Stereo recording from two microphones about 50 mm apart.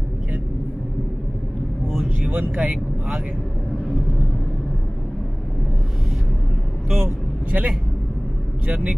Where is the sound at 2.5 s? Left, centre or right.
Right.